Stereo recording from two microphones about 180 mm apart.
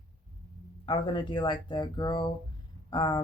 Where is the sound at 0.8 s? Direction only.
25° left (ahead or behind).